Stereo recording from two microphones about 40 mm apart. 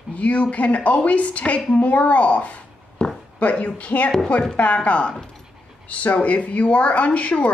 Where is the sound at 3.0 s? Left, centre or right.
Left.